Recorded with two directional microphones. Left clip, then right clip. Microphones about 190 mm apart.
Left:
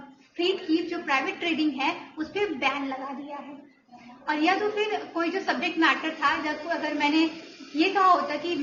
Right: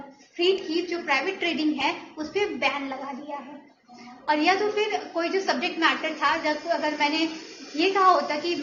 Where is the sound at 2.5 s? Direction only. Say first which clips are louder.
Right 1 dB; 20° right (ahead or behind).